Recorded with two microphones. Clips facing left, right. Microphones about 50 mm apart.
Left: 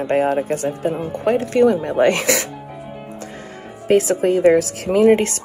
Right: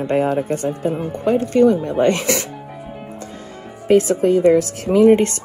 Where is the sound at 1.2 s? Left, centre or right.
Left.